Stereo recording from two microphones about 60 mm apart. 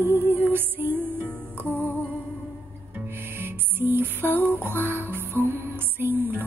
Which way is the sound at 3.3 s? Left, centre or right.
Right.